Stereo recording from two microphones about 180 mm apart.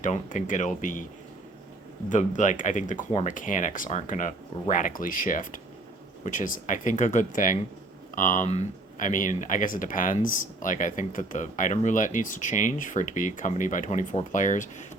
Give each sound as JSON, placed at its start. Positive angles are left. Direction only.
{"t": 0.0, "sound": "speech", "side_deg": 45}
{"t": 2.0, "sound": "speech", "side_deg": 45}